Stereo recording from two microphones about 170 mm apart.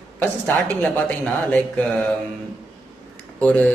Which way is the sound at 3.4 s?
10° left (ahead or behind).